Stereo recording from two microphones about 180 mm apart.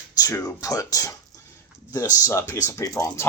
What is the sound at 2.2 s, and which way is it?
Speech, 15° left (ahead or behind).